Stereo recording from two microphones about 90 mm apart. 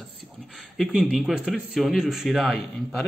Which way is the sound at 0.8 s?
10° right (ahead or behind).